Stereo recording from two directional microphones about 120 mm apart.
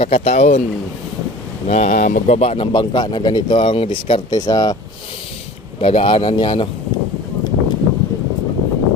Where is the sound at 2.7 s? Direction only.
40° left (ahead or behind).